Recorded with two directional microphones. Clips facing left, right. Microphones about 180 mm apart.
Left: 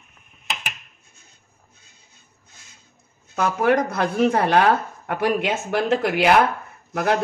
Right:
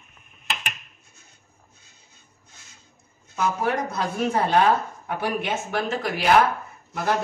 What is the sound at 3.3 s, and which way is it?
A man's voice, 75° left (ahead or behind).